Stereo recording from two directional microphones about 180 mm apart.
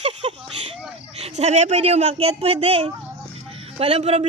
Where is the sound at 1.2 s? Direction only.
35° right (ahead or behind).